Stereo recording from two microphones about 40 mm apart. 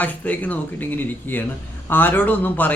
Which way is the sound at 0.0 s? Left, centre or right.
Left.